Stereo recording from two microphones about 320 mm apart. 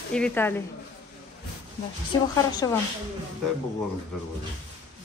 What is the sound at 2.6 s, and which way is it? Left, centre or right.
Speech, centre.